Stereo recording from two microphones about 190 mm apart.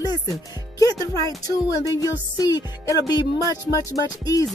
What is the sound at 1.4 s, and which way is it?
Speech, 20° left (ahead or behind).